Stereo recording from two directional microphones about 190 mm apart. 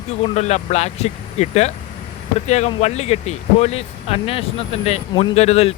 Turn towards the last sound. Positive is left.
turn(degrees=35)  # may be behind; listen again after turning